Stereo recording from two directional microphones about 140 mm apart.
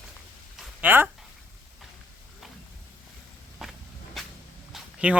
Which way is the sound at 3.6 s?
Centre (ahead or behind).